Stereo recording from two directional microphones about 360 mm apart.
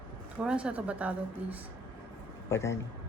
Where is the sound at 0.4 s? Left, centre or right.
Centre.